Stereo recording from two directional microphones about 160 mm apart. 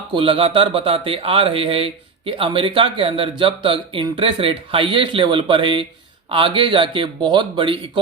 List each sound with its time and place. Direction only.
0.1 s a man's voice: 35° right (ahead or behind)